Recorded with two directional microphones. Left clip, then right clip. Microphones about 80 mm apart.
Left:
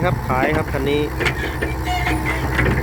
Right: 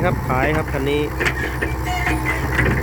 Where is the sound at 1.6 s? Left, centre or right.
Centre.